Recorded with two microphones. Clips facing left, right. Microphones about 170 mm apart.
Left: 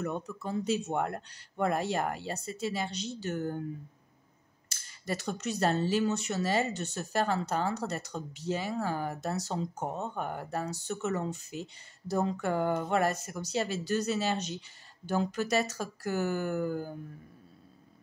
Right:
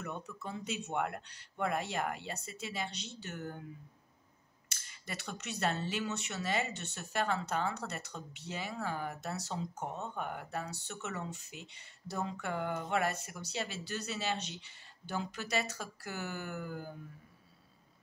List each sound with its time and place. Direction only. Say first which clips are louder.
0.0 s speech: left 7 dB; 40° left (ahead or behind)
4.6 s speech: left 10 dB; 35° left (ahead or behind)